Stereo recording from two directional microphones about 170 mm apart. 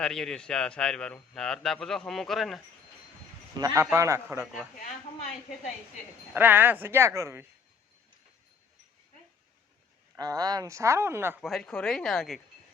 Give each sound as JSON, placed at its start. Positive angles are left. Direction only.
{"t": 0.0, "sound": "a man's voice", "side_deg": 5}
{"t": 3.8, "sound": "speech", "side_deg": -15}
{"t": 6.3, "sound": "speech", "side_deg": -10}
{"t": 10.2, "sound": "speech", "side_deg": -20}
{"t": 11.3, "sound": "a man's voice", "side_deg": 0}